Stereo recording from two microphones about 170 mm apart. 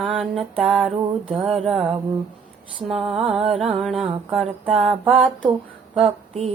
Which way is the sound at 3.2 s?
Centre (ahead or behind).